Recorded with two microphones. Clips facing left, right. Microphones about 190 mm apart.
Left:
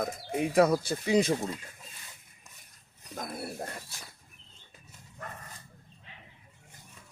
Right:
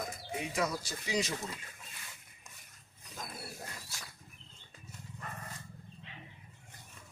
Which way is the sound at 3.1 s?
60° left (ahead or behind).